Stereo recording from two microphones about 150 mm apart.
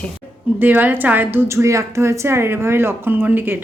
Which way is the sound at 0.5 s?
10° right (ahead or behind).